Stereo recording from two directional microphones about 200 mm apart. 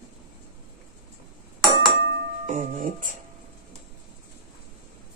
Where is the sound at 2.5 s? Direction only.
35° right (ahead or behind).